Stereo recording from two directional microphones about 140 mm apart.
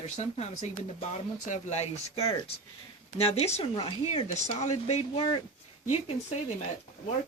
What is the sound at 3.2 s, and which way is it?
Speech, 45° left (ahead or behind).